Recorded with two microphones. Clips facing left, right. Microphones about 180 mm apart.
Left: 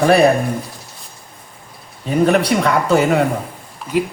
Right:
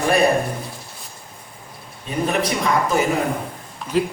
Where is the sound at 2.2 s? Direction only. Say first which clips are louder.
Left 6 dB; 70° left (ahead or behind).